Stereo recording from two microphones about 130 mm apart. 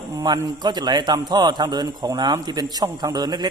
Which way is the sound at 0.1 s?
25° right (ahead or behind).